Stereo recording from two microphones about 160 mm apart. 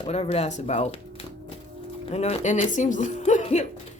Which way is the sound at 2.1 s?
45° left (ahead or behind).